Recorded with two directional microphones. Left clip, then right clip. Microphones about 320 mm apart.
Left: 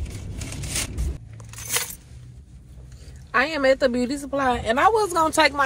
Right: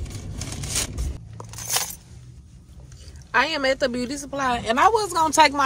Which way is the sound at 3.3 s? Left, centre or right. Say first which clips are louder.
Left 1 dB; centre.